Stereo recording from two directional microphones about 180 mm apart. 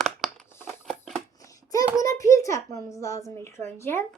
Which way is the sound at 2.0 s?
15° left (ahead or behind).